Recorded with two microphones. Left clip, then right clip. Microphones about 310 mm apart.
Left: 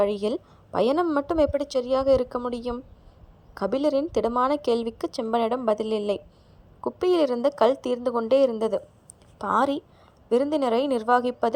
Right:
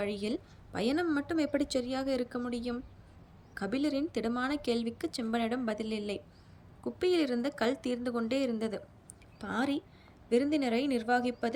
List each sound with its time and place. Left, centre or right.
0.0 s a woman's voice: centre